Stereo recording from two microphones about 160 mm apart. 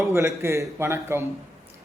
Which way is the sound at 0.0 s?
20° right (ahead or behind).